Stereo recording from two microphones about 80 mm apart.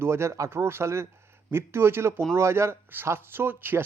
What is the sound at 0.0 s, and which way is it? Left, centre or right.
Speech, right.